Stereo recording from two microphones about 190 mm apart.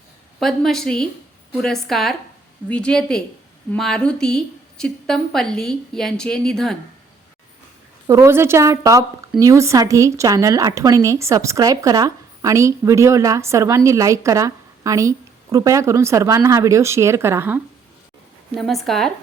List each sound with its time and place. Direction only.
0.3 s a woman's voice: centre (ahead or behind)
8.0 s speech: 15° right (ahead or behind)
18.5 s a woman's voice: centre (ahead or behind)